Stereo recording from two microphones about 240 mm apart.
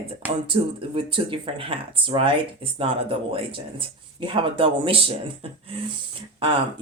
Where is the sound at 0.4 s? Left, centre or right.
Right.